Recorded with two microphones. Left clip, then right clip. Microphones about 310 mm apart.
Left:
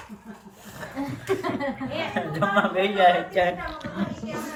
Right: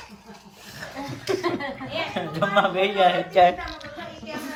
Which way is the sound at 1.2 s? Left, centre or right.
Right.